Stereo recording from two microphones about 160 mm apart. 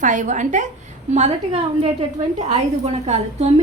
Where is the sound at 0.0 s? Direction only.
50° right (ahead or behind).